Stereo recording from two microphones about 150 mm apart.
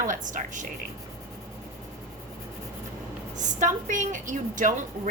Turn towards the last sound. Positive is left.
turn(degrees=-60)  # may be behind; listen again after turning